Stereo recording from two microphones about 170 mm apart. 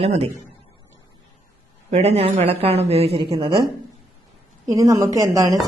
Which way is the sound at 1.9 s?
35° right (ahead or behind).